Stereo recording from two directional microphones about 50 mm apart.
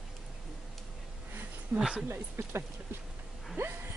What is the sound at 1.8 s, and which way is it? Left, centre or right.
Speech, centre.